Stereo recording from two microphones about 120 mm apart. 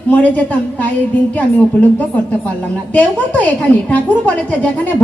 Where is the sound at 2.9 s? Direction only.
10° left (ahead or behind).